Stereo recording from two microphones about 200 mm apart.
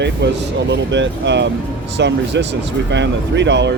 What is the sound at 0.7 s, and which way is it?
Speech, 65° right (ahead or behind).